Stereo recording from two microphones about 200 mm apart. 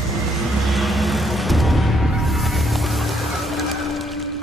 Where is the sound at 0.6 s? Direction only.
Centre (ahead or behind).